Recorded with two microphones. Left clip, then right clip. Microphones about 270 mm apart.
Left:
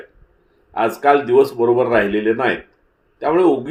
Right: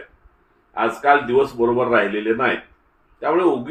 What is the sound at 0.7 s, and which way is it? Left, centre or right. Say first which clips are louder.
Speech: left 2 dB; left.